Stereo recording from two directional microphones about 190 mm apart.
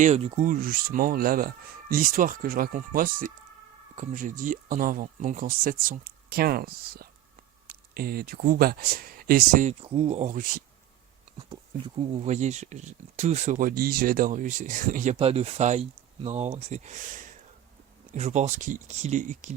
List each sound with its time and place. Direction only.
0.0 s speech: 35° right (ahead or behind)
0.4 s speech: 50° right (ahead or behind)
11.9 s speech: 25° right (ahead or behind)
12.3 s speech: 35° right (ahead or behind)
15.1 s speech: 30° right (ahead or behind)